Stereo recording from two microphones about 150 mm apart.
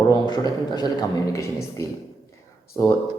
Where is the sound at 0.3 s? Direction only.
25° left (ahead or behind).